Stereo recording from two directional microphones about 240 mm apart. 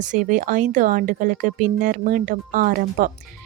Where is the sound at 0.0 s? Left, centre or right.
Right.